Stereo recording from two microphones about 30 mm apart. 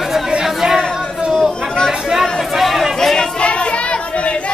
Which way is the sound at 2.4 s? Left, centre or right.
Centre.